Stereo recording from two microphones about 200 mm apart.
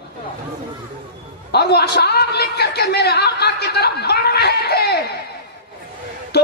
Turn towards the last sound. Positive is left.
turn(degrees=55)  # may be behind; listen again after turning